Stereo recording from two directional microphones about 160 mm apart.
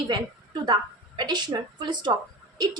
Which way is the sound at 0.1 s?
25° right (ahead or behind).